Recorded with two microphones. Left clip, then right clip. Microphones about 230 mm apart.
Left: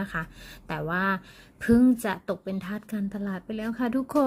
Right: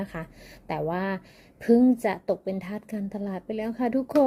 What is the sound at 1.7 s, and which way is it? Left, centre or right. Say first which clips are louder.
Speech: right 2 dB; left.